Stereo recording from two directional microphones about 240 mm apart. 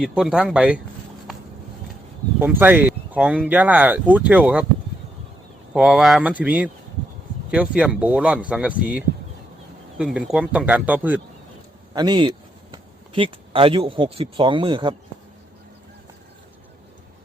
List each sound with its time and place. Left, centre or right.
0.0 s speech: centre
2.4 s speech: centre
5.7 s speech: centre
11.9 s speech: centre